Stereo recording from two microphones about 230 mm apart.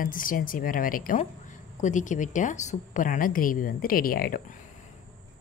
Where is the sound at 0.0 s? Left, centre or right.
Left.